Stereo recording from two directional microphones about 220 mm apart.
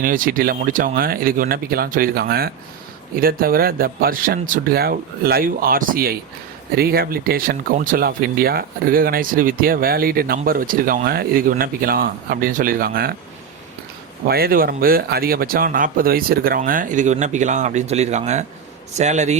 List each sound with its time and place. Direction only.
0.0 s speech: 40° right (ahead or behind)
14.3 s speech: 45° right (ahead or behind)